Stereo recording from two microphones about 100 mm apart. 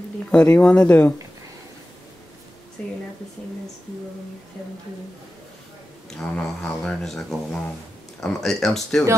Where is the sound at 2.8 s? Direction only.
10° left (ahead or behind).